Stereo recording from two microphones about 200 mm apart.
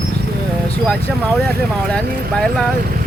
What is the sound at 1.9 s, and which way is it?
Speech, 5° left (ahead or behind).